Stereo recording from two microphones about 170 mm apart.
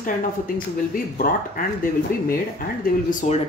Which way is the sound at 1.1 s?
55° left (ahead or behind).